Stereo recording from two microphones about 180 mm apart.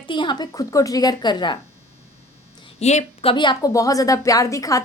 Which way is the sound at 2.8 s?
40° left (ahead or behind).